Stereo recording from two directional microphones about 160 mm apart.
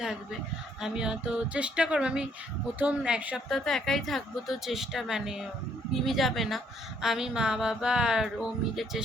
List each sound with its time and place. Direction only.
0.8 s speech: 5° right (ahead or behind)